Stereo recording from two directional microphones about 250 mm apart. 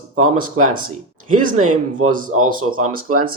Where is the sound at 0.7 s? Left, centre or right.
Right.